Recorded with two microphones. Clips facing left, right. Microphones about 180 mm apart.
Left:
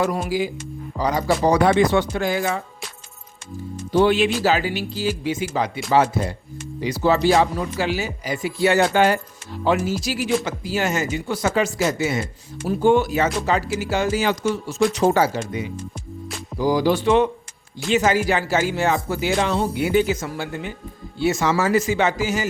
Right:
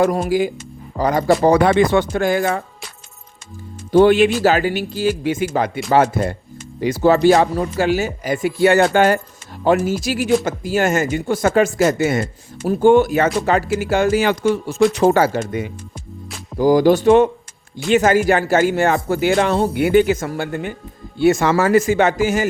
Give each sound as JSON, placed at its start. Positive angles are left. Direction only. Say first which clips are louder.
{"t": 0.0, "sound": "speech", "louder": "right 5 dB", "side_deg": -50}
{"t": 3.9, "sound": "speech", "louder": "right 6 dB", "side_deg": -50}